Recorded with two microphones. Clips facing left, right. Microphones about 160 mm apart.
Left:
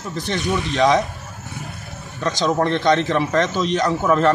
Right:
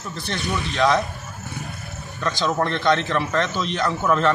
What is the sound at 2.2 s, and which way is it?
A man's voice, 15° left (ahead or behind).